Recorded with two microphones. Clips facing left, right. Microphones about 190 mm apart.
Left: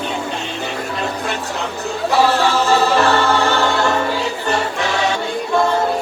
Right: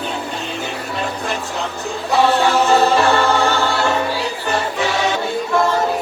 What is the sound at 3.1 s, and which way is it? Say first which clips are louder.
Choir: even; 15° right (ahead or behind).